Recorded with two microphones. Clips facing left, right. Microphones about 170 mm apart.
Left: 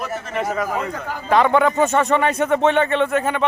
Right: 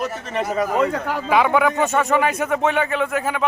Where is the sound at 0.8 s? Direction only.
70° right (ahead or behind).